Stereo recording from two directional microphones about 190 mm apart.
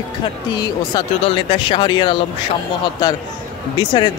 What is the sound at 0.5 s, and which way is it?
Speech, 25° left (ahead or behind).